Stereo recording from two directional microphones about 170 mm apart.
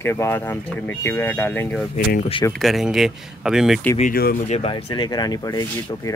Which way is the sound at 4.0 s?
60° left (ahead or behind).